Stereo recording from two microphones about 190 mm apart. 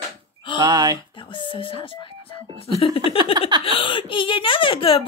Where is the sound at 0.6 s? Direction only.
20° right (ahead or behind).